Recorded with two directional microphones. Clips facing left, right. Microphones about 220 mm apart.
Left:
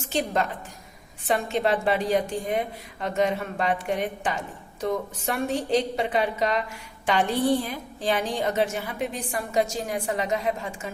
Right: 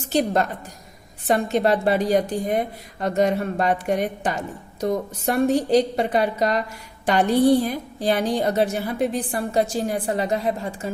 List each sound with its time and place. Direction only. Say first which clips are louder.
0.1 s a woman's voice: right 5 dB; 40° right (ahead or behind)